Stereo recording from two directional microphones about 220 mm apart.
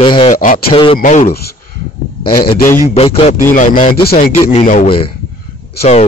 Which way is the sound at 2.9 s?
25° left (ahead or behind).